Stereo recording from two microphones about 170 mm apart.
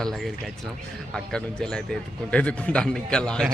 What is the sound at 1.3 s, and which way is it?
Speech, 5° left (ahead or behind).